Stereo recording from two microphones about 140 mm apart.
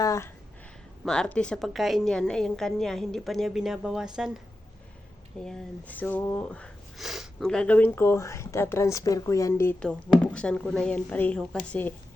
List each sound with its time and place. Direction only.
0.0 s speech: 20° left (ahead or behind)
1.0 s a woman's voice: 5° left (ahead or behind)
5.4 s speech: 5° left (ahead or behind)
7.0 s speech: centre (ahead or behind); by 9.7 s 20° left (ahead or behind)
9.8 s speech: 5° left (ahead or behind)